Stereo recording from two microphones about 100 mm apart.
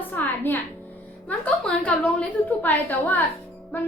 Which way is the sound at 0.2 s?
20° left (ahead or behind).